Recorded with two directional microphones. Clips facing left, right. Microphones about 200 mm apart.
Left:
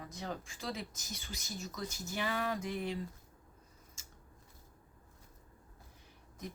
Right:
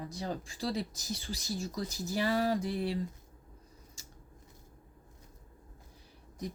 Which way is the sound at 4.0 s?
35° right (ahead or behind).